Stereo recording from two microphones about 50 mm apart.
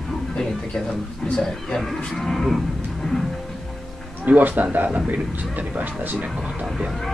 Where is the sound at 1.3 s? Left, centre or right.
Centre.